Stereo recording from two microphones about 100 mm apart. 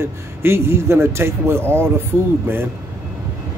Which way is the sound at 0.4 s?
25° right (ahead or behind).